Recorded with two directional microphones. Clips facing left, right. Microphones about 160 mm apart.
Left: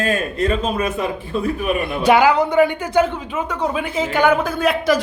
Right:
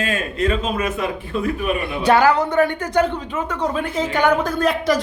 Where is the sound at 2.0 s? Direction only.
15° left (ahead or behind).